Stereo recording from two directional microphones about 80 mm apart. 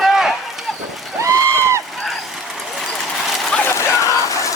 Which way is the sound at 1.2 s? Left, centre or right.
Right.